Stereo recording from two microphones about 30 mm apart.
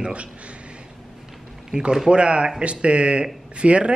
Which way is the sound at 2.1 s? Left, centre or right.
Right.